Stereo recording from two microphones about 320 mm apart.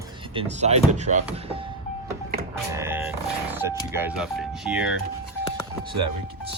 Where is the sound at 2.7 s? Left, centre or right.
Centre.